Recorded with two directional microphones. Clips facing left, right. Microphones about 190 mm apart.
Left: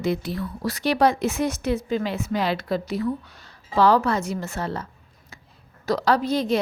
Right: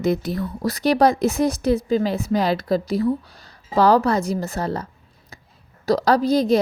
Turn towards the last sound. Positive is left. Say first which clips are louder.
# right 4 dB
turn(degrees=-40)  # may be behind; listen again after turning